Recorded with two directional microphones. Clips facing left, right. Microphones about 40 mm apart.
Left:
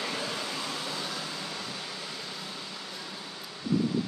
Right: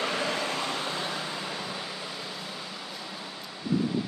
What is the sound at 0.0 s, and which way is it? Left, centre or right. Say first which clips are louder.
Vehicle: right 5 dB; right.